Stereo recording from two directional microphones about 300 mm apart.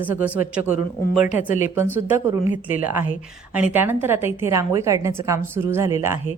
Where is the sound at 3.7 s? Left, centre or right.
Centre.